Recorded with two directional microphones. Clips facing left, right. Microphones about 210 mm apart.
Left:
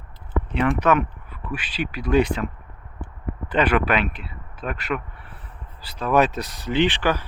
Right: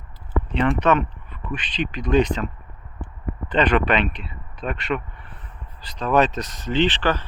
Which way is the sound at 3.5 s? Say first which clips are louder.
Right 1 dB; 10° left (ahead or behind).